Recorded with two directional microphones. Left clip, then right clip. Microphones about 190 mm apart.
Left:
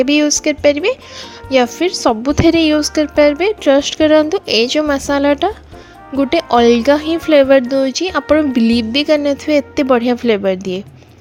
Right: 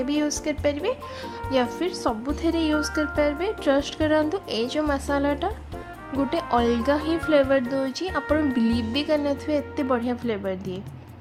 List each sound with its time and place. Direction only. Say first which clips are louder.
0.0 s speech: left 13 dB; 30° left (ahead or behind)